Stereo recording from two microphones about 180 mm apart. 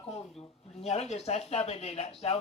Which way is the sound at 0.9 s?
35° left (ahead or behind).